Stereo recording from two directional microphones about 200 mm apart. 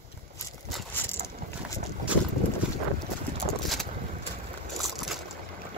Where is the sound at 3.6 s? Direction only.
Centre (ahead or behind).